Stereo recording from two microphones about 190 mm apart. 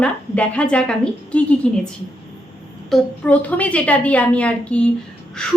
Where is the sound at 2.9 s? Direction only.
10° left (ahead or behind).